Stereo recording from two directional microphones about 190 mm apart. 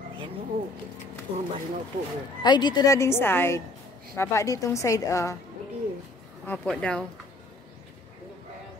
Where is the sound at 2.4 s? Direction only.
25° left (ahead or behind).